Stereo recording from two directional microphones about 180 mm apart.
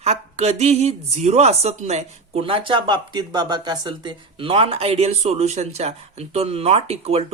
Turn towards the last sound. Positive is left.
turn(degrees=-35)  # may be behind; listen again after turning